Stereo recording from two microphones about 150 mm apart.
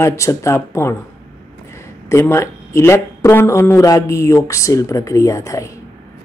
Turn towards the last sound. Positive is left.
turn(degrees=20)  # may be behind; listen again after turning